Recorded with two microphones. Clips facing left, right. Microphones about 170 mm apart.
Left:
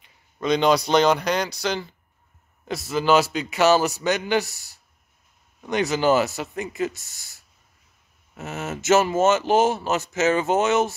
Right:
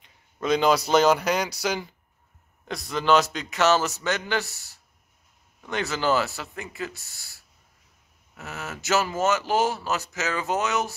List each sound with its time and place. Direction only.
0.0 s speech: 5° right (ahead or behind)
2.7 s speech: 5° left (ahead or behind); by 11.0 s 25° left (ahead or behind)